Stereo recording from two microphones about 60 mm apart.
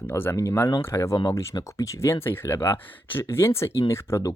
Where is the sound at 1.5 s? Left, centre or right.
Left.